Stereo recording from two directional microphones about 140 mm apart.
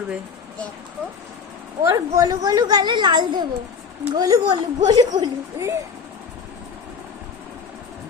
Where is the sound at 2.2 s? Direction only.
25° right (ahead or behind).